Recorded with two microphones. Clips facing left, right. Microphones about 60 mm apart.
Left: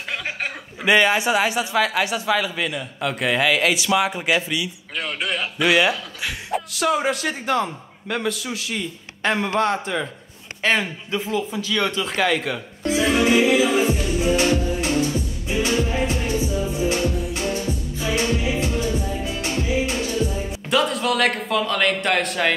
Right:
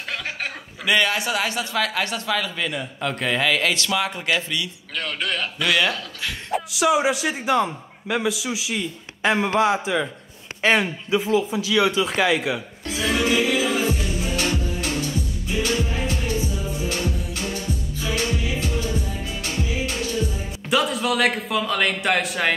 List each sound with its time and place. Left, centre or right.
0.8 s speech: left
6.5 s a man's voice: centre
12.8 s music: left
20.7 s a man's voice: centre